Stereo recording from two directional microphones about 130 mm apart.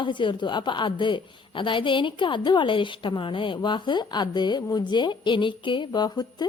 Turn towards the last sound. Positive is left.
turn(degrees=35)  # may be behind; listen again after turning